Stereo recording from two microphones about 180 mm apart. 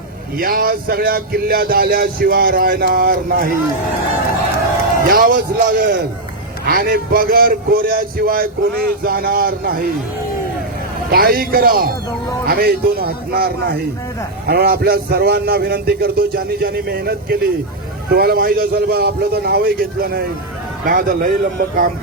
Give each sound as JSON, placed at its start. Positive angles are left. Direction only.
{"t": 0.3, "sound": "a man's voice", "side_deg": -55}
{"t": 5.0, "sound": "a man's voice", "side_deg": -55}
{"t": 11.1, "sound": "a man's voice", "side_deg": -55}